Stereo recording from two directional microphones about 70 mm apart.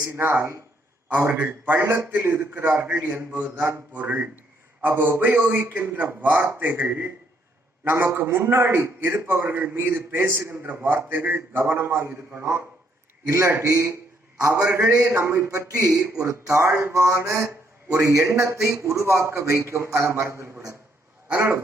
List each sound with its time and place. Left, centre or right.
0.2 s a man's voice: right